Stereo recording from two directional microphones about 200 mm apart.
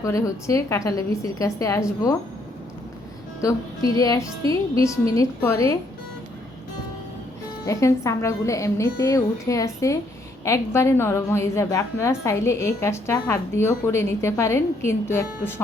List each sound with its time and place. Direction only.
0.0 s a woman's voice: 15° left (ahead or behind)
3.9 s a woman's voice: 15° left (ahead or behind)
7.7 s a woman's voice: 15° left (ahead or behind)